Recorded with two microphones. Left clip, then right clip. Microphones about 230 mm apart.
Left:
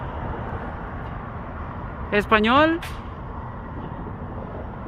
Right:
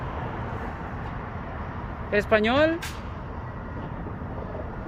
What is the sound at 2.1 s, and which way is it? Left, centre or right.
Speech, left.